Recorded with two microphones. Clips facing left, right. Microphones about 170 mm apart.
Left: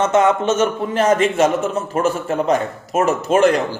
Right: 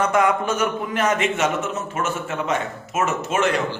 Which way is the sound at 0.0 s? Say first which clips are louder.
Left 4 dB; 25° left (ahead or behind).